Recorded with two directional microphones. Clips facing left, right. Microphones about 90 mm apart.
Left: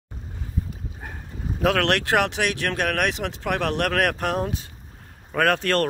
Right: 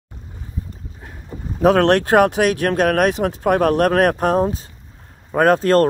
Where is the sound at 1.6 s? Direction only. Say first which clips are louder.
Right 8 dB; 35° right (ahead or behind).